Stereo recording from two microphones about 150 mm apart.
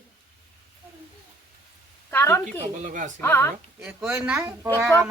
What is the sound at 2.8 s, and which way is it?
Speech, 55° right (ahead or behind).